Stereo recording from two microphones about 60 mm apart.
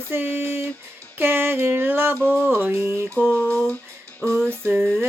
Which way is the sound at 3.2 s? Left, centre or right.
Left.